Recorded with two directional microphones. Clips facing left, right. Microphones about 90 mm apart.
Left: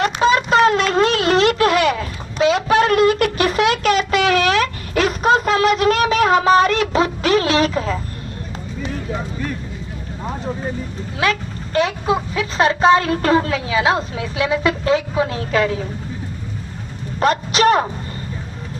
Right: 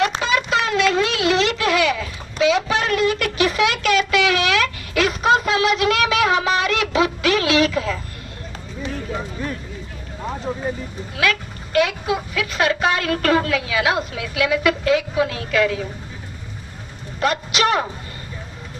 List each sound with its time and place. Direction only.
0.2 s a sound: 40° left (ahead or behind)
11.2 s speech: 30° left (ahead or behind)
17.2 s speech: 40° left (ahead or behind)